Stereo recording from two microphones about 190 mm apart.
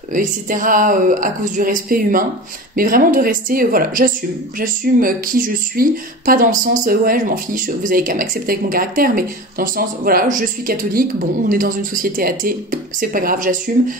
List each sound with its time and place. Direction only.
0.1 s speech: 45° right (ahead or behind)